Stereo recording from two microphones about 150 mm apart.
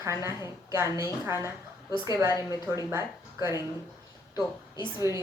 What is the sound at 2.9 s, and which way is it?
Speech, 20° right (ahead or behind).